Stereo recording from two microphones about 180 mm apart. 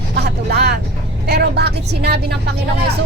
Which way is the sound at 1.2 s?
65° right (ahead or behind).